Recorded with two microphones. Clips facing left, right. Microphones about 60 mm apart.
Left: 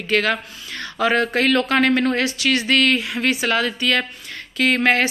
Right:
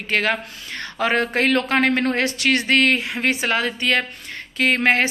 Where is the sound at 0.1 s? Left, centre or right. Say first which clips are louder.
Left 1 dB; right.